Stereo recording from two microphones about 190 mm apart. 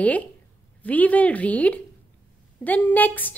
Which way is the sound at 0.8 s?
10° left (ahead or behind).